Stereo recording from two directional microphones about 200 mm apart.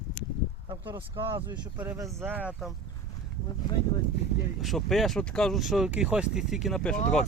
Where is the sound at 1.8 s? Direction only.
10° right (ahead or behind).